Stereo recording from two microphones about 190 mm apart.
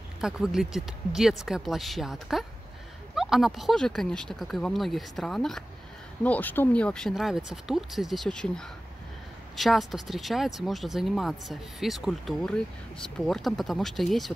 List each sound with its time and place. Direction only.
0.2 s speech: centre (ahead or behind)